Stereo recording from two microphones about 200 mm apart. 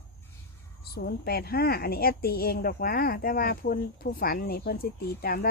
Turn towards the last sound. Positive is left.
turn(degrees=50)  # may be behind; listen again after turning